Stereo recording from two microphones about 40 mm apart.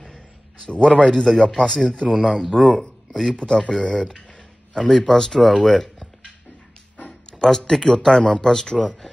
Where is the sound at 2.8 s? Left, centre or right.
Centre.